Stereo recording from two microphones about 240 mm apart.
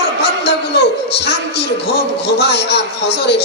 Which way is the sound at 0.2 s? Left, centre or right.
Left.